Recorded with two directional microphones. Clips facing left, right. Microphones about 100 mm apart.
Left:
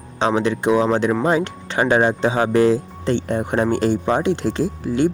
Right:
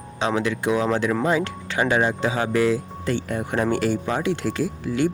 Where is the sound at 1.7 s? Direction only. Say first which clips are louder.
Left 4 dB; 40° left (ahead or behind).